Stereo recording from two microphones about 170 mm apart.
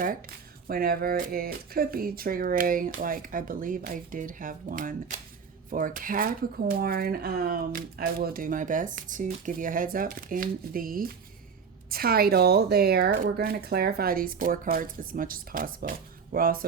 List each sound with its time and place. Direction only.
0.7 s speech: 60° right (ahead or behind)